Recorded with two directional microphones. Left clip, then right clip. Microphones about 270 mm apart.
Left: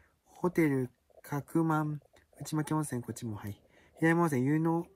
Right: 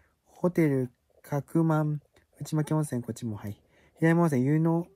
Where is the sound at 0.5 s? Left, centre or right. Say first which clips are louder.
Right 3 dB; centre.